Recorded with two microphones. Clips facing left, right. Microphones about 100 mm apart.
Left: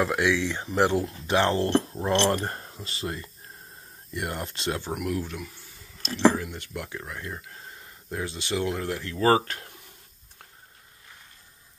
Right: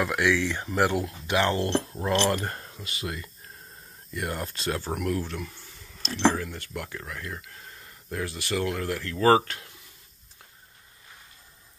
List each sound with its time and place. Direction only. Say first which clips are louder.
0.0 s speech: left 1 dB; 25° left (ahead or behind)
4.9 s speech: right 1 dB; 10° left (ahead or behind)
9.4 s a sound: left 1 dB; 40° left (ahead or behind)